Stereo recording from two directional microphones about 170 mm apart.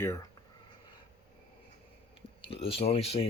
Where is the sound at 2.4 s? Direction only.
35° left (ahead or behind).